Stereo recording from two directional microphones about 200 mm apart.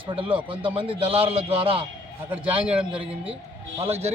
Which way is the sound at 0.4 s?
25° right (ahead or behind).